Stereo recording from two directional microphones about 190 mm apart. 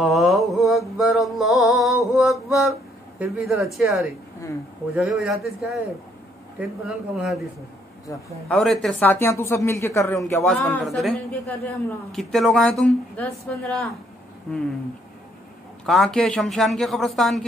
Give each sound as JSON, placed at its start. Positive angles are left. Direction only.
{"t": 0.0, "sound": "music", "side_deg": 0}
{"t": 2.1, "sound": "mantra", "side_deg": 0}
{"t": 3.2, "sound": "speech", "side_deg": 0}
{"t": 6.9, "sound": "speech", "side_deg": 0}
{"t": 8.1, "sound": "speech", "side_deg": 15}
{"t": 8.5, "sound": "speech", "side_deg": 0}
{"t": 10.5, "sound": "speech", "side_deg": 0}
{"t": 15.8, "sound": "speech", "side_deg": 0}